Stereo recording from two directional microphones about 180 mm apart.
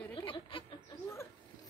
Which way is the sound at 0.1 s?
30° left (ahead or behind).